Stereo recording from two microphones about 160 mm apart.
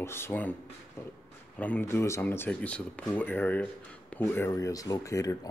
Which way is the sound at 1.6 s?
10° left (ahead or behind).